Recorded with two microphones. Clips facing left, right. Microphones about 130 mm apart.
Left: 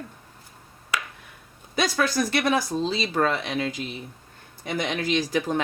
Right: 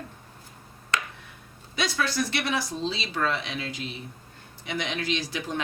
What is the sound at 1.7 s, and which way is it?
Speech, 45° left (ahead or behind).